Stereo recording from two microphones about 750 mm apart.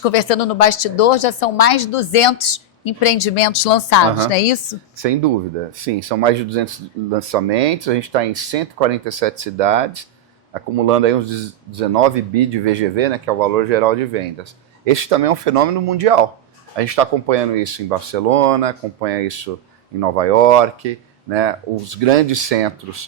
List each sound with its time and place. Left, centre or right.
0.0 s a woman's voice: left
4.9 s speech: right